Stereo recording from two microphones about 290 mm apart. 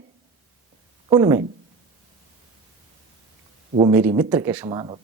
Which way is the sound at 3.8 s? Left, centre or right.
Centre.